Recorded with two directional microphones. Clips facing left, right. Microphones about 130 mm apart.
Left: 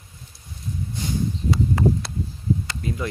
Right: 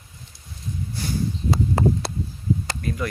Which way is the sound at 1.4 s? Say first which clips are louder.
Even; 30° right (ahead or behind).